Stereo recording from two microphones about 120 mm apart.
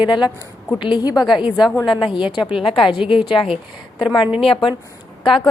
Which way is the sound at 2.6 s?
45° left (ahead or behind).